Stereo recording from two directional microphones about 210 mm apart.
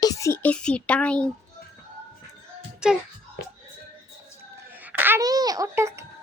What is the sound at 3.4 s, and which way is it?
Music, 45° left (ahead or behind).